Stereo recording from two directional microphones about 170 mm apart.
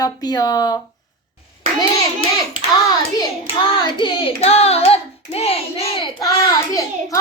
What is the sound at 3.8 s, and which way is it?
Hands, 30° left (ahead or behind).